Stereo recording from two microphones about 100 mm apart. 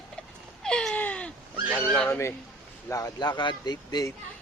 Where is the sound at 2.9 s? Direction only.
40° left (ahead or behind).